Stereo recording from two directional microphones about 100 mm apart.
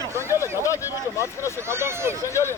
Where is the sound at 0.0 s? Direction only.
25° right (ahead or behind).